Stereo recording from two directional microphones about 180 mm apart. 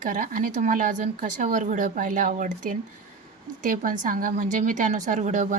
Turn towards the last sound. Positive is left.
turn(degrees=-45)  # may be behind; listen again after turning